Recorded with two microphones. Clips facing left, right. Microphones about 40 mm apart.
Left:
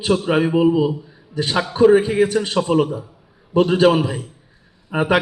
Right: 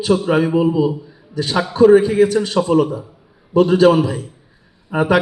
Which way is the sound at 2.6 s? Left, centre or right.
Centre.